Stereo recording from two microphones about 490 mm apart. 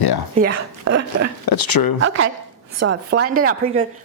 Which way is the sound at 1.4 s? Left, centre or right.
Left.